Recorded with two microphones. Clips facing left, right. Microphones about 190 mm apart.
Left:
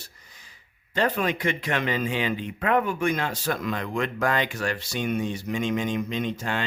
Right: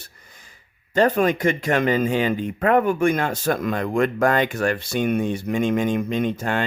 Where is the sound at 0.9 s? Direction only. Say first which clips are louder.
Right 7 dB; 45° right (ahead or behind).